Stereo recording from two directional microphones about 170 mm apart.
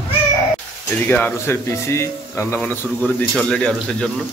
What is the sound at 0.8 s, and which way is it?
Speech, 15° left (ahead or behind).